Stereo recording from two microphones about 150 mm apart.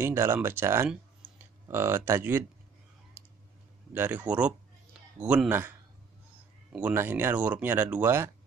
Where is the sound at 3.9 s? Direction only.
10° right (ahead or behind).